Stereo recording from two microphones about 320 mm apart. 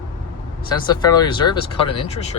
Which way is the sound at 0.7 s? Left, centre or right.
Centre.